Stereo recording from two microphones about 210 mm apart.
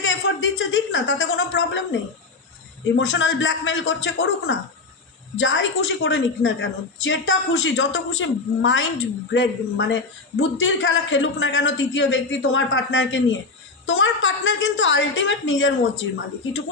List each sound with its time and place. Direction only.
0.0 s a woman's voice: 60° left (ahead or behind)
2.9 s a man's voice: 60° left (ahead or behind)